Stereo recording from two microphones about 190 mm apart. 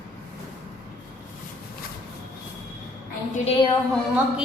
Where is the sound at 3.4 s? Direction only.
25° left (ahead or behind).